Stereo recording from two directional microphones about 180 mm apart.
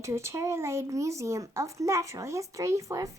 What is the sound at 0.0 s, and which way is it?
Speech, 15° right (ahead or behind).